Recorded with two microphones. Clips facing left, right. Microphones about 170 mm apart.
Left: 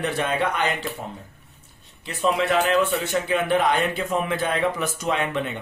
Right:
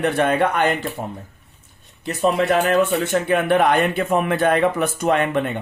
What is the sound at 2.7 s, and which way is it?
A man's voice, 55° right (ahead or behind).